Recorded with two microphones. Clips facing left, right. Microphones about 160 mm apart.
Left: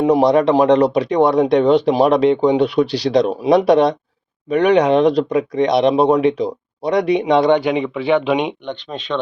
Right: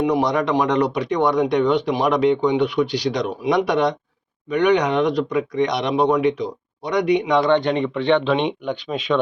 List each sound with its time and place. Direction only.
0.0 s speech: 30° left (ahead or behind)
7.5 s speech: 5° left (ahead or behind)
8.6 s speech: 10° right (ahead or behind)